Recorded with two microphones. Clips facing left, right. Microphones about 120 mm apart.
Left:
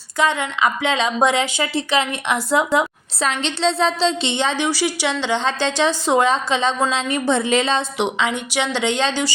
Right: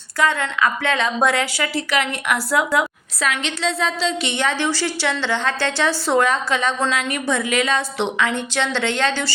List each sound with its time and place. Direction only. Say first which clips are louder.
0.2 s a woman's voice: left 1 dB; 20° left (ahead or behind)